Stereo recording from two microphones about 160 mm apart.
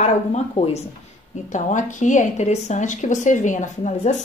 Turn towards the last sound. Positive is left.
turn(degrees=50)  # may be behind; listen again after turning